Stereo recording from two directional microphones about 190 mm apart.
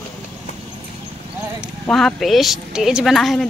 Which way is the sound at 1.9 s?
5° left (ahead or behind).